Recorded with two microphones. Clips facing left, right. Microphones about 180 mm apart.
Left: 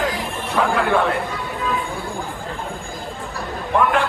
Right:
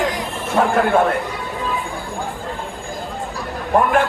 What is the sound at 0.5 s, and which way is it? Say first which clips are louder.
Speech: right 3 dB; 45° right (ahead or behind).